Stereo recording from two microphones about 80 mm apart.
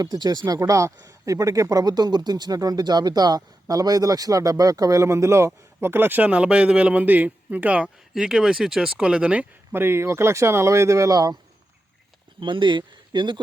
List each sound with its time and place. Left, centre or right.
0.0 s speech: right
0.7 s speech: right; by 7.9 s centre
8.1 s speech: centre
9.7 s speech: right
12.4 s speech: right